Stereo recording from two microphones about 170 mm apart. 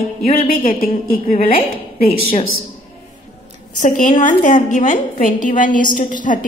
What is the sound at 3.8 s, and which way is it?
A woman's voice, 50° left (ahead or behind).